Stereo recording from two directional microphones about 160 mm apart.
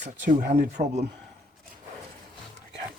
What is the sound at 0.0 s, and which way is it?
Speech, 65° right (ahead or behind).